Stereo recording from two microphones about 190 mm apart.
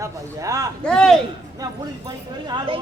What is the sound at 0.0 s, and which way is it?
Speech, 15° right (ahead or behind).